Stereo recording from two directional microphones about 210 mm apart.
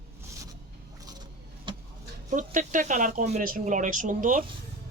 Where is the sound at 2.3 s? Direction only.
35° right (ahead or behind).